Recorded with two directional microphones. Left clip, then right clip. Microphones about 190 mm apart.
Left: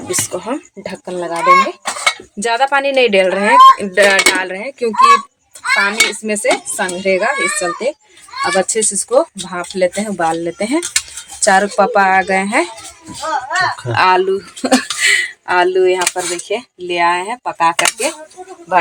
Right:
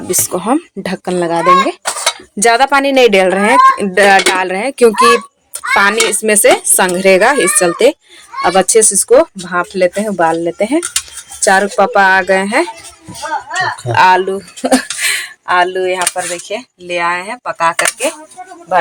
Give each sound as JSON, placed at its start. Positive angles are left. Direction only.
{"t": 0.1, "sound": "speech", "side_deg": -20}
{"t": 0.4, "sound": "speech", "side_deg": -40}
{"t": 2.4, "sound": "speech", "side_deg": -40}
{"t": 5.8, "sound": "speech", "side_deg": -50}
{"t": 8.4, "sound": "speech", "side_deg": -35}
{"t": 13.9, "sound": "speech", "side_deg": -5}